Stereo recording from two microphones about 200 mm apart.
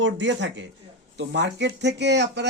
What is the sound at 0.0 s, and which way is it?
Speech, 65° right (ahead or behind).